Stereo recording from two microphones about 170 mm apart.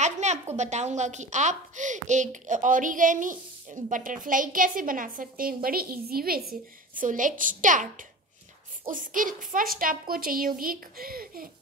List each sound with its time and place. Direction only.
0.0 s a sound: 40° right (ahead or behind)
0.6 s a woman's voice: 45° right (ahead or behind); by 6.4 s 60° right (ahead or behind)
7.0 s a woman's voice: 50° right (ahead or behind)
8.9 s a woman's voice: 50° right (ahead or behind)